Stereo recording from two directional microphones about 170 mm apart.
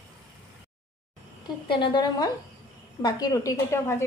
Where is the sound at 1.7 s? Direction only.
30° left (ahead or behind).